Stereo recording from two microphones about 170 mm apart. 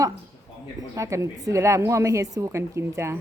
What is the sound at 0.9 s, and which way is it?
A woman's voice, 15° right (ahead or behind).